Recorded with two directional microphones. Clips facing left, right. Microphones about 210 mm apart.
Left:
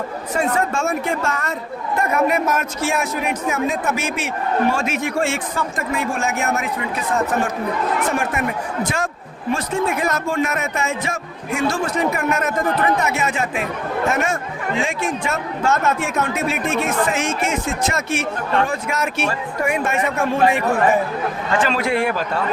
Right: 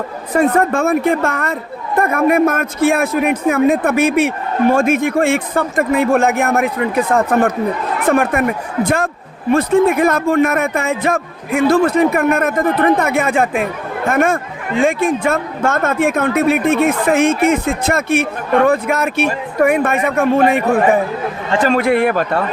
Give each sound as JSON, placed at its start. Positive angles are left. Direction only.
{"t": 0.3, "sound": "a man's voice", "side_deg": -55}
{"t": 21.7, "sound": "a man's voice", "side_deg": -55}